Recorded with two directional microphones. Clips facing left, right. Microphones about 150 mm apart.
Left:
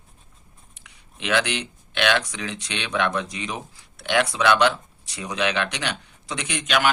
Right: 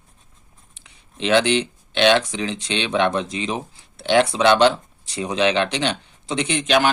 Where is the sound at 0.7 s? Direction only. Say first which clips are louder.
Right 4 dB; 30° right (ahead or behind).